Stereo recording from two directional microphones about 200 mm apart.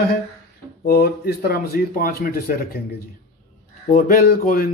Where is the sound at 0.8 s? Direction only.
55° left (ahead or behind).